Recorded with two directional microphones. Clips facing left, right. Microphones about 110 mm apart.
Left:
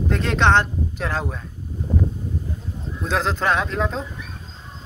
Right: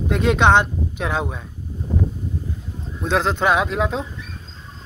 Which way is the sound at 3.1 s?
Centre (ahead or behind).